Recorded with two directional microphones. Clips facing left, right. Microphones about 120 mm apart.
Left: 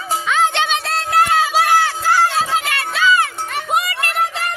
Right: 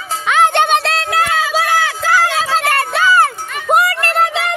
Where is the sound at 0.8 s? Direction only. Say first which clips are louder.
Right 4 dB; 90° right.